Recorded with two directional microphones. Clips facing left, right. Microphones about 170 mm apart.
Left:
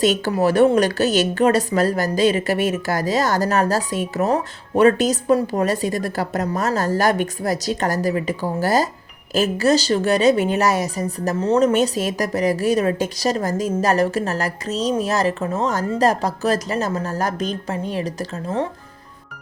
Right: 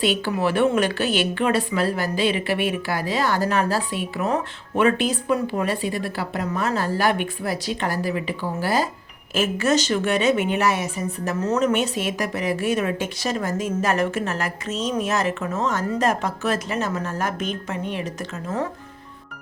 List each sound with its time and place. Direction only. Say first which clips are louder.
0.0 s speech: left 4 dB; 45° left (ahead or behind)